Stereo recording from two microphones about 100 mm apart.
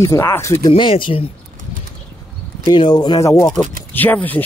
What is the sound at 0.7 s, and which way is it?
Speech, 55° left (ahead or behind).